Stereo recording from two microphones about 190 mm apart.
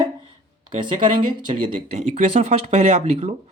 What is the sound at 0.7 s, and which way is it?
Speech, 25° right (ahead or behind).